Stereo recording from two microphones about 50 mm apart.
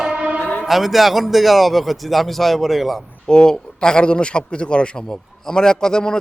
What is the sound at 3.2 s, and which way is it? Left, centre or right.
A man's voice, centre.